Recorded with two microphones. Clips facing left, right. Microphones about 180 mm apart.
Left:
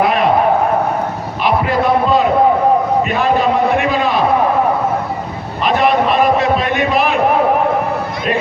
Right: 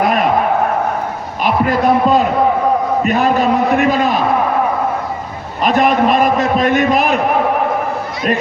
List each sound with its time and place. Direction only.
0.0 s a sound: 45° right (ahead or behind)
1.5 s music: 45° right (ahead or behind)
3.0 s a man's voice: 40° right (ahead or behind)
5.6 s a man's voice: 45° right (ahead or behind)